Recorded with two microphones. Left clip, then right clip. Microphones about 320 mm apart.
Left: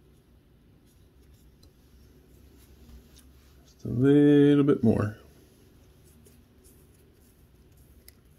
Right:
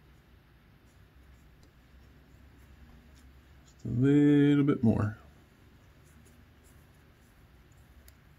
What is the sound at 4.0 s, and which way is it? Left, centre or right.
Speech, centre.